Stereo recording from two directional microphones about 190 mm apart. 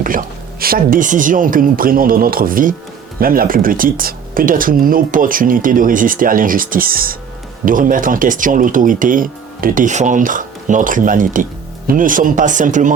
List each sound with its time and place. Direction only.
0.0 s speech: 45° right (ahead or behind)